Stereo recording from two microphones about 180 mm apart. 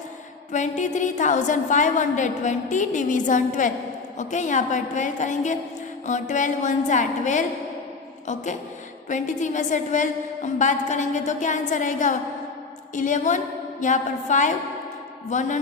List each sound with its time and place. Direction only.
0.5 s a sound: 40° left (ahead or behind)
0.9 s a woman's voice: 45° left (ahead or behind)
9.0 s a woman's voice: 45° left (ahead or behind)